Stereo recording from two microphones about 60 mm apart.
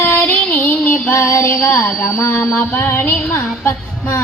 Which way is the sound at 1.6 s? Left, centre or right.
Left.